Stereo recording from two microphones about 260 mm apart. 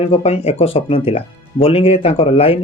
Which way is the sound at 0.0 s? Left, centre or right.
Left.